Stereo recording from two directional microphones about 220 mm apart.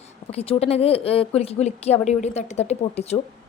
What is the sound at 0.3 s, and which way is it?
Speech, 25° left (ahead or behind).